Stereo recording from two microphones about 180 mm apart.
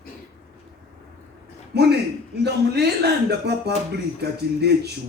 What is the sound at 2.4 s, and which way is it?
A man's voice, 65° right (ahead or behind).